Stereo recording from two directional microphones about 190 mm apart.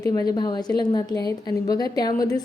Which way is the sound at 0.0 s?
20° left (ahead or behind).